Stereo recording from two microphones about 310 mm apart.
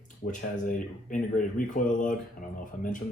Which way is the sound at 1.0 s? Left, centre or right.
Left.